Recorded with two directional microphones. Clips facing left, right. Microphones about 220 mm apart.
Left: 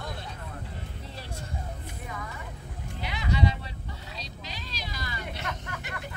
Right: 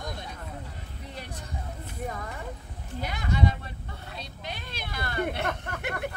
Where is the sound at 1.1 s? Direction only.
20° right (ahead or behind).